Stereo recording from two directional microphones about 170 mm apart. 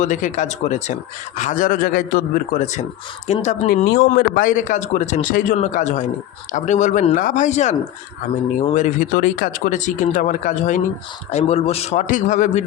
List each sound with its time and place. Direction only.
0.0 s a man's voice: 45° left (ahead or behind)
4.1 s a man's voice: 55° left (ahead or behind)